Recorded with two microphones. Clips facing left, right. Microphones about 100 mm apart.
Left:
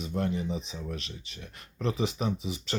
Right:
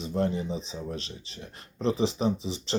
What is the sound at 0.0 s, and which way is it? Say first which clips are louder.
Speech: right 3 dB; 30° right (ahead or behind).